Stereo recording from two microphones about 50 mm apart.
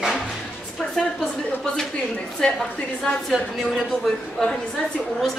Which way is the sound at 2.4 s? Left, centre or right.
Centre.